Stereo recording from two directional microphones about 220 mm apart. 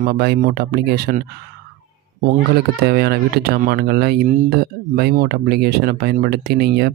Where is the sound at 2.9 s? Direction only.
45° right (ahead or behind).